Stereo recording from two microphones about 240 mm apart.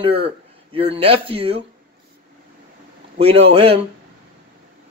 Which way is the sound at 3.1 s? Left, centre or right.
Right.